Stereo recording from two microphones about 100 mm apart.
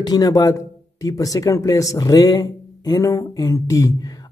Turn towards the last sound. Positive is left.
turn(degrees=35)  # may be behind; listen again after turning